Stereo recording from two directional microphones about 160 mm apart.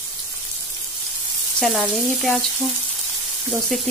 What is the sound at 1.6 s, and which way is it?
Speech, centre (ahead or behind).